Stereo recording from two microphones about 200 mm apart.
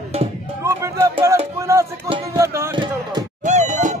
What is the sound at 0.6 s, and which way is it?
Music, 10° right (ahead or behind).